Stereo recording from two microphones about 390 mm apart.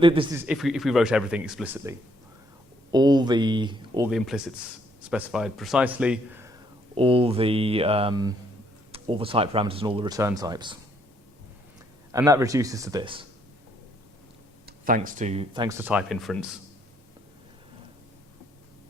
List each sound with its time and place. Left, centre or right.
0.0 s speech: centre
12.1 s speech: centre
14.7 s speech: right; by 16.6 s centre